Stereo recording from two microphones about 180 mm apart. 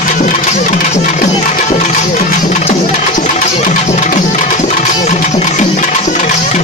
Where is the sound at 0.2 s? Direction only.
45° left (ahead or behind).